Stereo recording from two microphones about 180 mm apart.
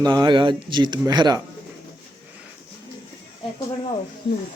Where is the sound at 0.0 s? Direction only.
25° right (ahead or behind).